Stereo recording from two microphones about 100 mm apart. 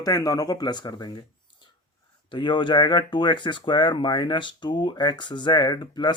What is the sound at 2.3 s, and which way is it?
Speech, 50° left (ahead or behind).